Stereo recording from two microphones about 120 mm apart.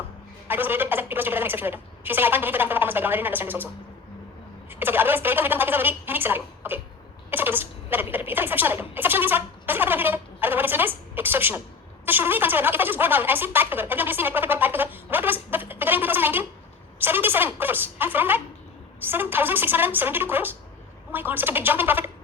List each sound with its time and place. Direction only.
0.4 s a woman's voice: 15° right (ahead or behind)
4.7 s a woman's voice: 15° right (ahead or behind)